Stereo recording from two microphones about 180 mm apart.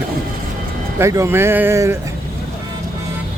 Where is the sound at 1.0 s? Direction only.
15° right (ahead or behind).